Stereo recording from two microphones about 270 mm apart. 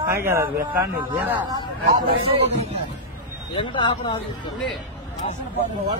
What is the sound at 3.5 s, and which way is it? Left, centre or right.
Speech, centre.